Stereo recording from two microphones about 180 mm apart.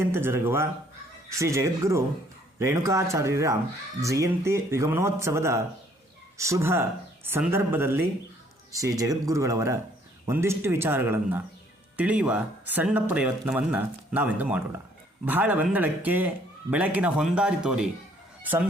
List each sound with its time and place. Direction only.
0.0 s speech: 15° right (ahead or behind)